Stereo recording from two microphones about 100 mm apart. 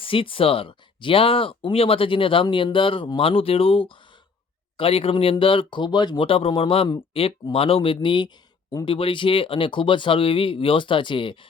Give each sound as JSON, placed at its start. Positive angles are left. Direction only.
{"t": 0.0, "sound": "speech", "side_deg": 65}